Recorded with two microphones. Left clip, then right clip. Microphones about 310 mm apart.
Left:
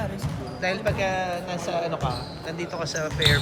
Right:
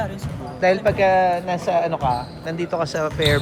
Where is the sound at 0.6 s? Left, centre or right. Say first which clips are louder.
Right 9 dB; centre.